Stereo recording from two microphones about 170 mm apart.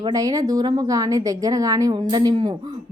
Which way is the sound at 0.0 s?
20° right (ahead or behind).